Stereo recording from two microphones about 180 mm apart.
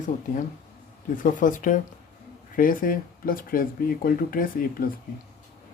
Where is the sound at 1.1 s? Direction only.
45° left (ahead or behind).